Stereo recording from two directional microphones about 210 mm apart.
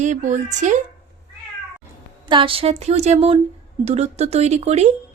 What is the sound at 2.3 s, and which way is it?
Speech, 25° right (ahead or behind).